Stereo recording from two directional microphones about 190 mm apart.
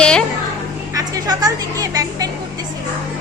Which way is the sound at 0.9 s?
20° right (ahead or behind).